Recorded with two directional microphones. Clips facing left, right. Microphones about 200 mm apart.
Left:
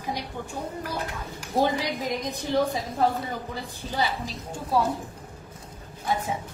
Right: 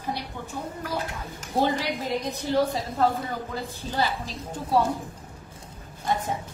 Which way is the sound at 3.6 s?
15° left (ahead or behind).